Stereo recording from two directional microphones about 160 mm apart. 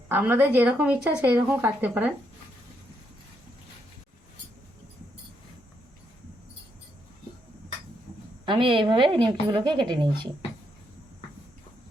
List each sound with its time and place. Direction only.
0.1 s a woman's voice: 10° right (ahead or behind)
8.4 s a woman's voice: 30° right (ahead or behind)